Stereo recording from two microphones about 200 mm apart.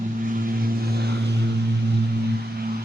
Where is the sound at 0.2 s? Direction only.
45° right (ahead or behind).